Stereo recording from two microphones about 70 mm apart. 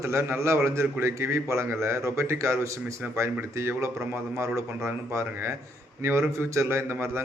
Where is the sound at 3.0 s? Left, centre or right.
Right.